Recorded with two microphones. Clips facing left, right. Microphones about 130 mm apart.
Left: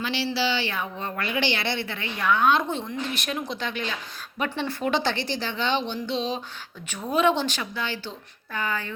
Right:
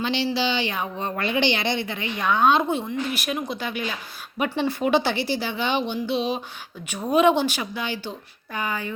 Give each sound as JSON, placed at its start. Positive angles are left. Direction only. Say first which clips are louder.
{"t": 0.0, "sound": "a woman's voice", "louder": "right 3 dB", "side_deg": -20}